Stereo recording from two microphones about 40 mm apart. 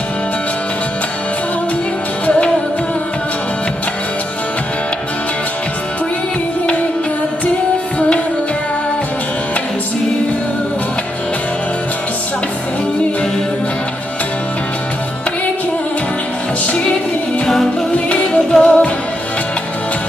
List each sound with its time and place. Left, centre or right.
2.2 s music: left
18.2 s music: left